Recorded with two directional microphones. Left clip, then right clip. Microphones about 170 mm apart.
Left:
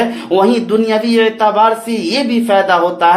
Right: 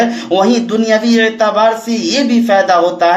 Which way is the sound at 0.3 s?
15° left (ahead or behind).